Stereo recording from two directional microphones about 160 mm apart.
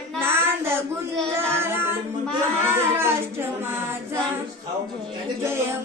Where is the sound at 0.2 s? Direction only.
15° right (ahead or behind).